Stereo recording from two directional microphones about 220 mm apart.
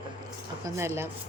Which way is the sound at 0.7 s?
10° right (ahead or behind).